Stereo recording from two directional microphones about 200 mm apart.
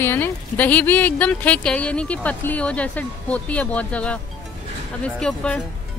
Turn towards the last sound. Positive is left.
turn(degrees=5)  # may be behind; listen again after turning